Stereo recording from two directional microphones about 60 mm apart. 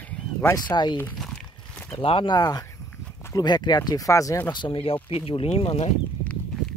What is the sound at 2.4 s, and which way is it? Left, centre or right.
Speech, left.